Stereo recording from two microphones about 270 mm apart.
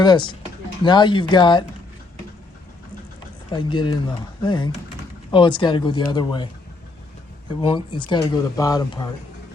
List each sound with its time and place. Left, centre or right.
0.0 s speech: centre
3.5 s speech: centre
7.6 s speech: centre